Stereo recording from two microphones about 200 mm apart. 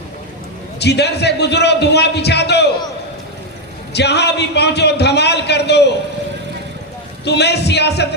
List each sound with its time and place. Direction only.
0.8 s a man's voice: 55° left (ahead or behind)
3.9 s a man's voice: 55° left (ahead or behind)
7.3 s a man's voice: 55° left (ahead or behind)